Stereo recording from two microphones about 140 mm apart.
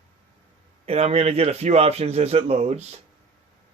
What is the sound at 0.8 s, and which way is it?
Speech, 45° right (ahead or behind).